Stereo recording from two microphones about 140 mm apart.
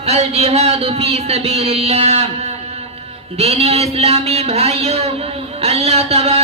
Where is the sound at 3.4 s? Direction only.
45° right (ahead or behind).